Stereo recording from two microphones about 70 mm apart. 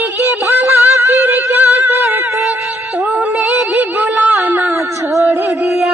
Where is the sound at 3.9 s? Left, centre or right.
Right.